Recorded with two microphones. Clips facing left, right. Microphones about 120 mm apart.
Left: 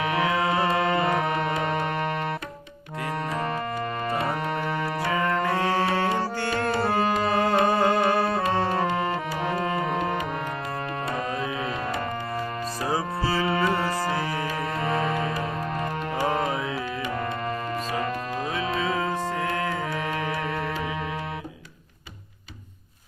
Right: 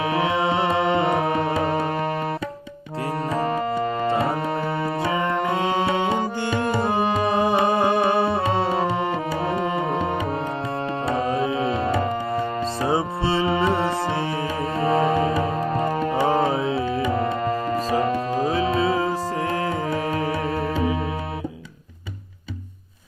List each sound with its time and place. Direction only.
0.0 s music: 30° right (ahead or behind)
3.3 s music: 30° right (ahead or behind)
11.0 s tabla: 30° right (ahead or behind)
12.3 s music: 25° right (ahead or behind)